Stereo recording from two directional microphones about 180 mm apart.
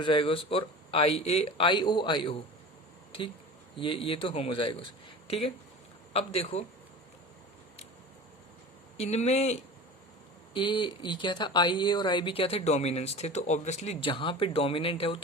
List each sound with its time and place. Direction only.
0.0 s speech: 30° left (ahead or behind)
3.8 s speech: 30° left (ahead or behind)
9.0 s speech: 35° left (ahead or behind)
10.5 s speech: 25° left (ahead or behind)